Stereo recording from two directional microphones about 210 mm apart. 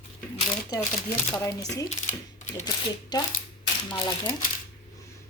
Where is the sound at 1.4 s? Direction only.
15° left (ahead or behind).